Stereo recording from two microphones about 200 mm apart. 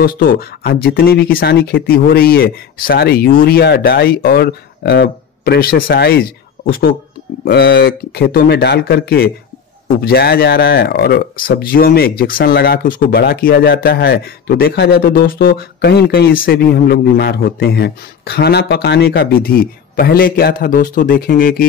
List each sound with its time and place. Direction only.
0.0 s speech: 50° left (ahead or behind)